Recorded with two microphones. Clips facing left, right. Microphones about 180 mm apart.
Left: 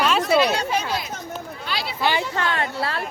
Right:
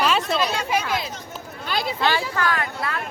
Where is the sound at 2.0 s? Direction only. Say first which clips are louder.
Left 1 dB; 20° left (ahead or behind).